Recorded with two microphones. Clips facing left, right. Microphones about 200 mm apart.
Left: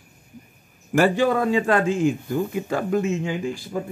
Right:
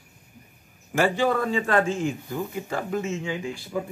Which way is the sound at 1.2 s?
40° left (ahead or behind).